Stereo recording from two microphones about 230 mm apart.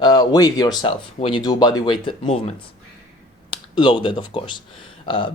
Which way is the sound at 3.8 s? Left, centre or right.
Left.